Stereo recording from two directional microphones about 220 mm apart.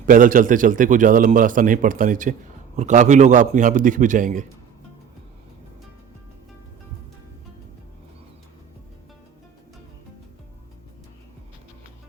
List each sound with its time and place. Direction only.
0.0 s a man's voice: 35° right (ahead or behind)